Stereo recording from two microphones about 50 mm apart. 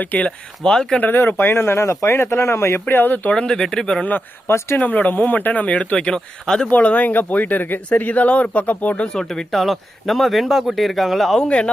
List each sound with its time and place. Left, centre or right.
0.0 s speech: left
0.6 s speech: centre
1.0 s speech: left
2.8 s speech: left
3.3 s speech: centre
4.4 s speech: left
4.8 s speech: left; by 6.7 s centre
6.7 s speech: left
9.1 s speech: centre
11.3 s speech: left